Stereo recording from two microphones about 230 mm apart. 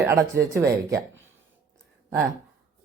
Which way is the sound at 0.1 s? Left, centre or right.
Centre.